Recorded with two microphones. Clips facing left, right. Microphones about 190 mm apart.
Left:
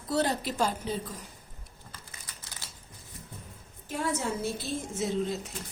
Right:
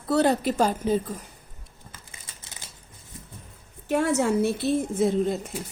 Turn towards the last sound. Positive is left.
turn(degrees=-55)  # may be behind; listen again after turning